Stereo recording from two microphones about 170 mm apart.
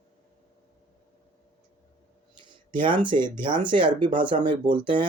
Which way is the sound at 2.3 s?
30° right (ahead or behind).